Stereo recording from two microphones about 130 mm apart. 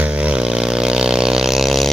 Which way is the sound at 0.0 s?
10° right (ahead or behind).